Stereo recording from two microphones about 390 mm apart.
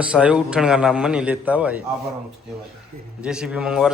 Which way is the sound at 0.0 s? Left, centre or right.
Centre.